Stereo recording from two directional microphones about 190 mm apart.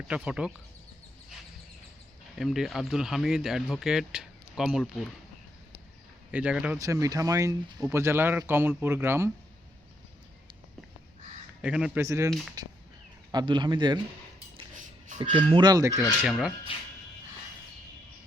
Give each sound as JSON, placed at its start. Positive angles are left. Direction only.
{"t": 0.1, "sound": "speech", "side_deg": -5}
{"t": 2.4, "sound": "speech", "side_deg": 0}
{"t": 6.3, "sound": "speech", "side_deg": -5}
{"t": 11.6, "sound": "speech", "side_deg": -5}
{"t": 15.2, "sound": "speech", "side_deg": -30}
{"t": 16.2, "sound": "speech", "side_deg": 0}